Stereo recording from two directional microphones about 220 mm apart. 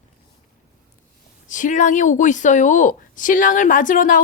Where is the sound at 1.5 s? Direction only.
35° left (ahead or behind).